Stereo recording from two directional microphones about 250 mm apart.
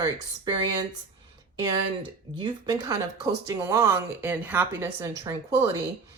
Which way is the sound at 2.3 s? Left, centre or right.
Centre.